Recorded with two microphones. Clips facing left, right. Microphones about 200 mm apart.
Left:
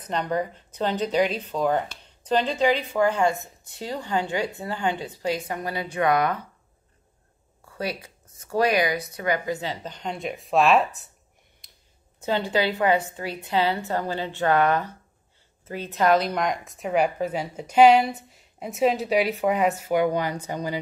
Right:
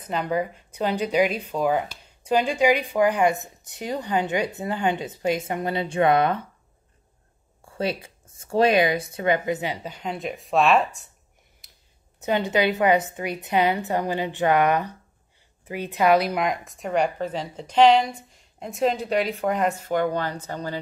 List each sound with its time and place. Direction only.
0.0 s speech: 5° right (ahead or behind); by 6.4 s 25° right (ahead or behind)
7.6 s speech: 25° right (ahead or behind); by 10.9 s centre (ahead or behind)
11.6 s a sound: 5° right (ahead or behind)
12.2 s speech: 20° right (ahead or behind); by 20.8 s 10° left (ahead or behind)